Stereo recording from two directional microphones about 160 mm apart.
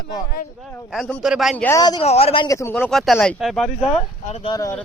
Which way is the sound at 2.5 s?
20° left (ahead or behind).